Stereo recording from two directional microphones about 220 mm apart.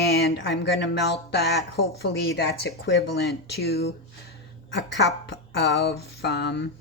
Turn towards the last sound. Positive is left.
turn(degrees=50)  # may be behind; listen again after turning